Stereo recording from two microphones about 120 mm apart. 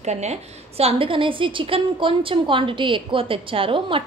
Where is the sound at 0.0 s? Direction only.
70° right (ahead or behind).